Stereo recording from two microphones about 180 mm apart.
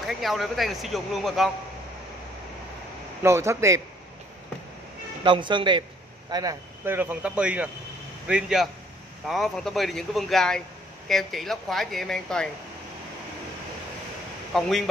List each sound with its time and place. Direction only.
0.0 s speech: centre (ahead or behind)
3.2 s speech: 15° right (ahead or behind)
5.2 s a man's voice: 25° right (ahead or behind); by 12.4 s 5° left (ahead or behind)
14.5 s speech: centre (ahead or behind)